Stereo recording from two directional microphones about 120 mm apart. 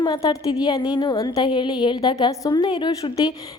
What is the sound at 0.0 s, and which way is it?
A woman's voice, 40° left (ahead or behind).